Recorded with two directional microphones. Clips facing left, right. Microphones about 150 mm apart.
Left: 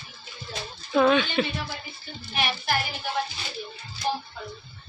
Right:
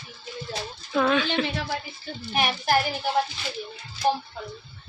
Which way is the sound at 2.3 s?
45° right (ahead or behind).